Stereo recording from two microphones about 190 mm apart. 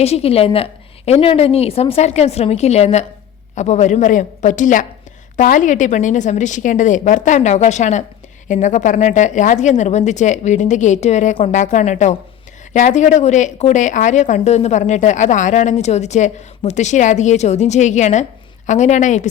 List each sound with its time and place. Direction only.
0.0 s speech: 30° left (ahead or behind)